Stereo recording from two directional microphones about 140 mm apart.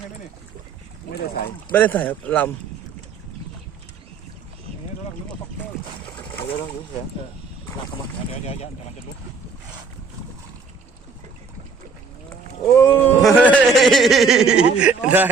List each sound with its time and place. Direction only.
1.7 s speech: 10° left (ahead or behind)
8.3 s speech: 50° left (ahead or behind)
12.3 s a sound: 15° left (ahead or behind)
13.2 s speech: 10° left (ahead or behind); by 15.3 s 10° right (ahead or behind)